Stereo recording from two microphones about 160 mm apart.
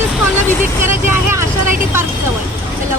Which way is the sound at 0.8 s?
15° right (ahead or behind).